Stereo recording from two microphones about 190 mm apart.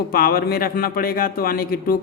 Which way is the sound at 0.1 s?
55° left (ahead or behind).